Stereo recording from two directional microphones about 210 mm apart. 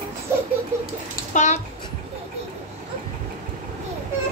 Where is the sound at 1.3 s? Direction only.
35° left (ahead or behind).